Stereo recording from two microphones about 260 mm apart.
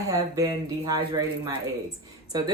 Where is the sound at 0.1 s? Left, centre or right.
Centre.